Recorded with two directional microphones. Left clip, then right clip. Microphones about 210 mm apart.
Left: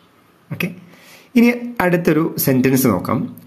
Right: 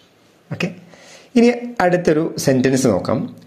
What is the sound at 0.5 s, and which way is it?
Speech, 15° left (ahead or behind).